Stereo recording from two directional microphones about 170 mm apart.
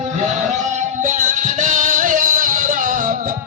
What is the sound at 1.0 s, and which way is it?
Music, 50° right (ahead or behind).